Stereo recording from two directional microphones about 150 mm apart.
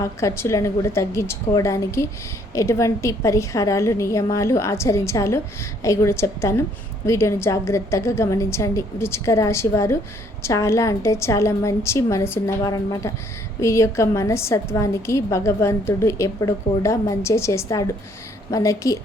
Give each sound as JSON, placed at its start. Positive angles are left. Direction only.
{"t": 0.0, "sound": "a woman's voice", "side_deg": 20}